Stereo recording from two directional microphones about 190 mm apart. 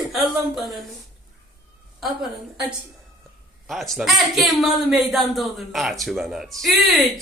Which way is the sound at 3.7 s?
Centre (ahead or behind).